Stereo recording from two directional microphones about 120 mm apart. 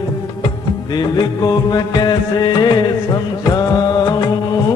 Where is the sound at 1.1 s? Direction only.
35° left (ahead or behind).